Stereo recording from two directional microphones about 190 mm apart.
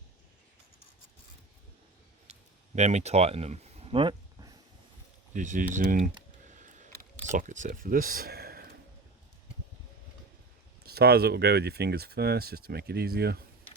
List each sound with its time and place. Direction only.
2.7 s speech: 35° right (ahead or behind)
5.3 s speech: 45° right (ahead or behind)
6.5 s a sound: 40° right (ahead or behind)
7.3 s speech: 40° right (ahead or behind)
10.8 s speech: 55° right (ahead or behind)